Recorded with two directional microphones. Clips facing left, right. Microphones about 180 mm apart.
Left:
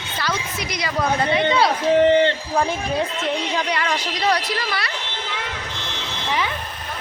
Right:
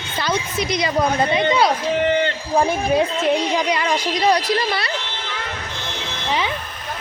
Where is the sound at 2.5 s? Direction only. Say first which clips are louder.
Right 4 dB; 20° right (ahead or behind).